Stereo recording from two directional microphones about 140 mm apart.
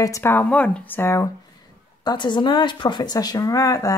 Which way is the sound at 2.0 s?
30° left (ahead or behind).